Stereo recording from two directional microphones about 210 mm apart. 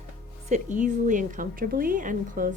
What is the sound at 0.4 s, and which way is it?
Speech, 35° right (ahead or behind).